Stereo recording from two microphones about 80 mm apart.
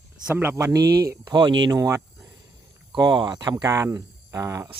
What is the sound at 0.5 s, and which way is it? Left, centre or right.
Speech, right.